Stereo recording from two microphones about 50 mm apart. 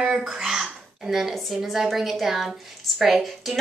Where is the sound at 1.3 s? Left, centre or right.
Centre.